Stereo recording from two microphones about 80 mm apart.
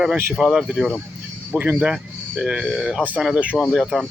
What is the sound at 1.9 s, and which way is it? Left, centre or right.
Speech, centre.